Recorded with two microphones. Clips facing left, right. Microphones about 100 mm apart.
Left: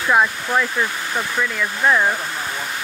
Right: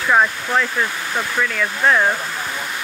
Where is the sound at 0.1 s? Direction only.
Centre (ahead or behind).